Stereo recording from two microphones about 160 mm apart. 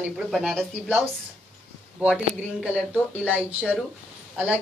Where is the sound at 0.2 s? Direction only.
Centre (ahead or behind).